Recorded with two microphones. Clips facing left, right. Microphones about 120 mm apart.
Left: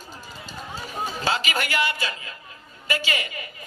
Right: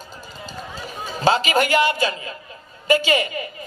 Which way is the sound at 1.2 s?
30° right (ahead or behind).